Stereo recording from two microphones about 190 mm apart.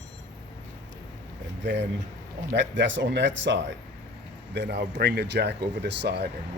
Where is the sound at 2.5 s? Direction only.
70° right (ahead or behind).